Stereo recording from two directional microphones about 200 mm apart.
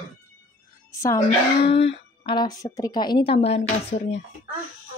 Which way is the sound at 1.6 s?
30° left (ahead or behind).